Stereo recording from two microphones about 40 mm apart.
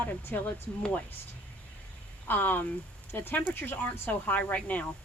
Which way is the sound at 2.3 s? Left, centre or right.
Left.